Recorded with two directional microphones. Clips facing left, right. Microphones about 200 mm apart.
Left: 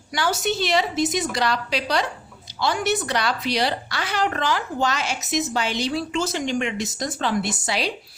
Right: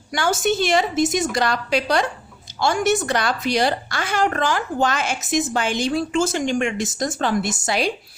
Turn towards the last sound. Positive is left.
turn(degrees=-50)  # may be behind; listen again after turning